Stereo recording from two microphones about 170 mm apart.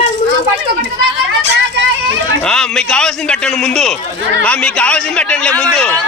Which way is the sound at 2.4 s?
5° left (ahead or behind).